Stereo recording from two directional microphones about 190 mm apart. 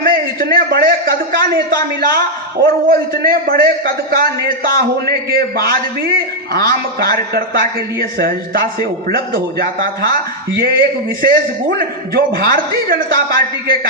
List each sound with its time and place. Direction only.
0.0 s a man's voice: 50° right (ahead or behind)